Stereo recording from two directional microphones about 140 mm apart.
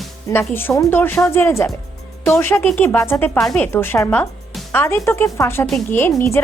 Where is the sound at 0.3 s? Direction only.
15° left (ahead or behind).